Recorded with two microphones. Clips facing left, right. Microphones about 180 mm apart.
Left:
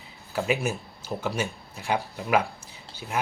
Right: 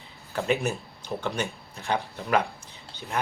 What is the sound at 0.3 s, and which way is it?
Speech, 5° left (ahead or behind).